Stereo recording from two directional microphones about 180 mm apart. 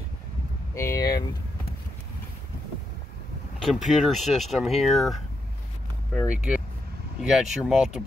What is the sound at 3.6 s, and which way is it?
Speech, centre (ahead or behind).